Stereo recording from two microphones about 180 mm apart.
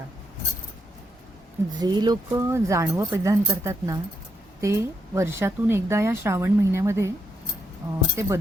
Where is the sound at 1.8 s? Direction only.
25° right (ahead or behind).